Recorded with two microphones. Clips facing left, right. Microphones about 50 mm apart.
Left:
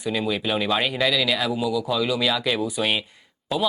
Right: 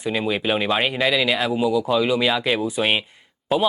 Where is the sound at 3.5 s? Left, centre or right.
Centre.